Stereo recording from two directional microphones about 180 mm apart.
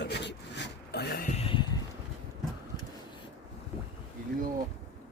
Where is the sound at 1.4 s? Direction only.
30° left (ahead or behind).